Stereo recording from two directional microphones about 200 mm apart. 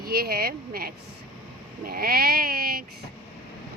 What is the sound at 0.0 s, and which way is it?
Speech, 50° right (ahead or behind).